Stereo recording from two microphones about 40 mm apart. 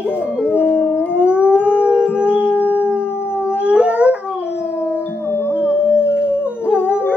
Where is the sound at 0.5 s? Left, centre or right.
Right.